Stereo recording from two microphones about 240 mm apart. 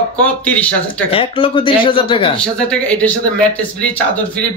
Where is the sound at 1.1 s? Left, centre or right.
Left.